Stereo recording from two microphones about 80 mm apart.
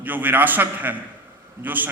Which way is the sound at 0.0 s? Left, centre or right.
Right.